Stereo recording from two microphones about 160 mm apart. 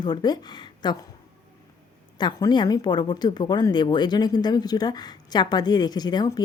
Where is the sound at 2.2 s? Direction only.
25° left (ahead or behind).